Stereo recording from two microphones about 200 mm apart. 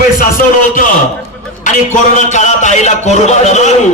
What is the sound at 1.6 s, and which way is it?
A man's voice, 40° left (ahead or behind).